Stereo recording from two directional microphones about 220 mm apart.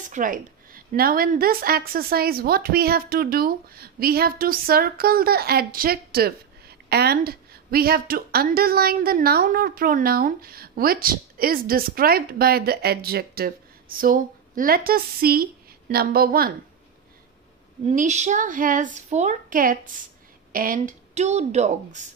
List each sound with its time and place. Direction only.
0.0 s a woman's voice: 35° right (ahead or behind)
17.8 s a woman's voice: 30° right (ahead or behind)